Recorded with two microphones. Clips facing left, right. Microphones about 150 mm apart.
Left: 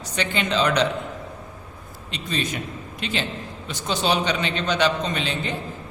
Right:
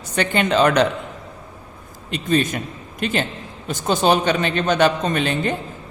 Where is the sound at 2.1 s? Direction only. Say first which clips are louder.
Right 8 dB; 50° right (ahead or behind).